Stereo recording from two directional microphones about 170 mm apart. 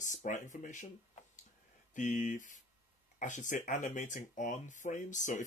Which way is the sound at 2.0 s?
45° left (ahead or behind).